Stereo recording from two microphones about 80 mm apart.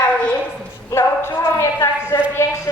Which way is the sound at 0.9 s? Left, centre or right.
Left.